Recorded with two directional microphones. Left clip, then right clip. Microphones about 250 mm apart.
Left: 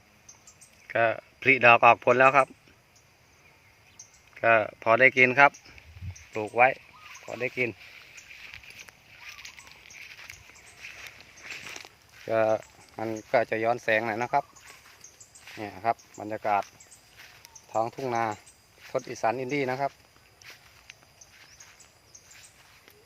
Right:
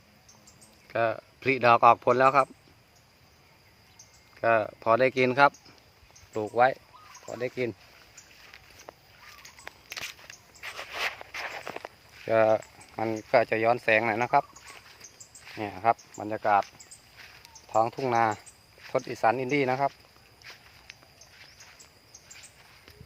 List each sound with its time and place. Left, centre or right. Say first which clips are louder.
0.9 s speech: left 2 dB; centre
4.4 s speech: left 2 dB; centre
12.3 s speech: right 2 dB; centre
15.6 s speech: right 3 dB; centre
17.7 s speech: right 3 dB; centre
20.4 s walk: right 1 dB; centre